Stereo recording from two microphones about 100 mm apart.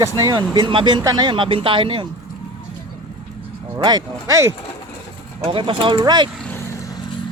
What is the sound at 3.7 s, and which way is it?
Speech, 45° right (ahead or behind).